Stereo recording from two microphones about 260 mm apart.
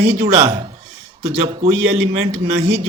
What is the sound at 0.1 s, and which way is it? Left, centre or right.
Speech, right.